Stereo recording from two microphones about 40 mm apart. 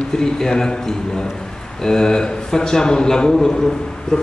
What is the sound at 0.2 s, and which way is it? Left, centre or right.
A man's voice, centre.